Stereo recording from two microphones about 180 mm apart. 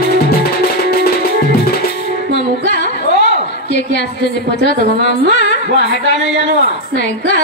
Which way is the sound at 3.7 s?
70° left (ahead or behind).